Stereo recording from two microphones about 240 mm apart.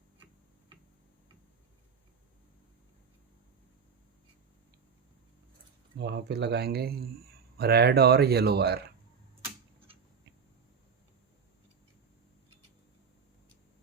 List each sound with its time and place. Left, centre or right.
6.0 s speech: right